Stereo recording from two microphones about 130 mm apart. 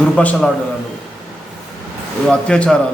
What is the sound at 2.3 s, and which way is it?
Speech, 5° left (ahead or behind).